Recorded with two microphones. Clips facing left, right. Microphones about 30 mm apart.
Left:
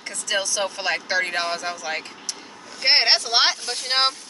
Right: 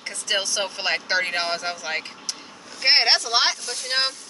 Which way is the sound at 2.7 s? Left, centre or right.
Centre.